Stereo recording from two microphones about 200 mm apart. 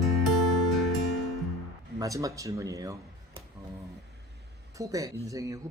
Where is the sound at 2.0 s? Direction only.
15° right (ahead or behind).